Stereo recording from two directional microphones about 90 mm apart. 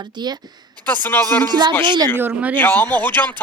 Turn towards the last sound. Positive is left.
turn(degrees=20)  # may be behind; listen again after turning